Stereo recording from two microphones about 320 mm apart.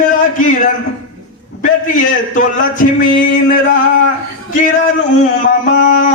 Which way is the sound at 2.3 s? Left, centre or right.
Left.